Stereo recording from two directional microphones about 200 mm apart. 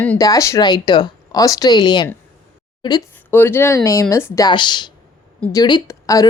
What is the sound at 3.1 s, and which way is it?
Speech, 10° left (ahead or behind).